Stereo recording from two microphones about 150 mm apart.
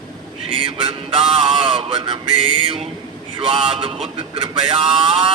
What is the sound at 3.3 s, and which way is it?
Vehicle, 35° right (ahead or behind).